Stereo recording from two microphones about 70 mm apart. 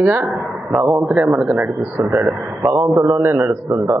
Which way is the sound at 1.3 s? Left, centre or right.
Centre.